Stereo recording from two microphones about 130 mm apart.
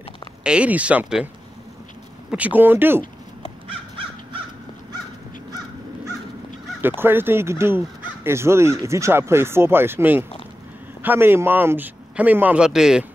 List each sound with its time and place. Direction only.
0.4 s a man's voice: 10° right (ahead or behind)
2.3 s a man's voice: 15° right (ahead or behind)
3.6 s crow: 40° right (ahead or behind)
7.0 s a man's voice: 15° right (ahead or behind)